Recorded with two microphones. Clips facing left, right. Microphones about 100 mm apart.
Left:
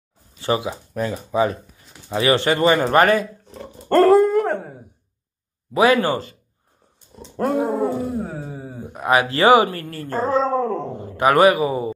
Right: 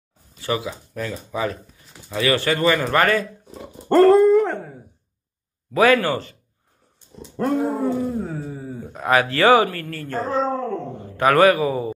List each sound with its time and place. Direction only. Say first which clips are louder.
0.4 s speech: left 3 dB; 25° left (ahead or behind)
3.4 s dog: right 2 dB; 5° right (ahead or behind)
4.4 s dog: even; 15° left (ahead or behind)
5.7 s speech: even; 20° left (ahead or behind)
7.6 s speech: left 1 dB; 20° left (ahead or behind); by 10.9 s 35° left (ahead or behind)
11.1 s speech: left 1 dB; 20° left (ahead or behind)